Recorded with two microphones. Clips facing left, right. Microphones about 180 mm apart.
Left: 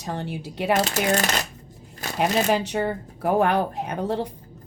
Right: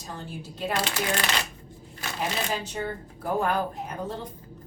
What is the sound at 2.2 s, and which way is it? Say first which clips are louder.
Speech: left 9 dB; 75° left (ahead or behind).